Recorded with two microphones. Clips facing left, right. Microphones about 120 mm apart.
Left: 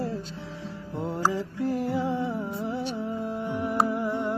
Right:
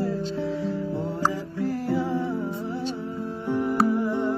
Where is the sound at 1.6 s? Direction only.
20° left (ahead or behind).